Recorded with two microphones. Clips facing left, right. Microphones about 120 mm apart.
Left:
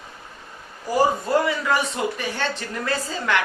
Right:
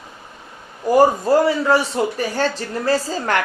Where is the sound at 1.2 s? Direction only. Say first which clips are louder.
Right 6 dB; 35° right (ahead or behind).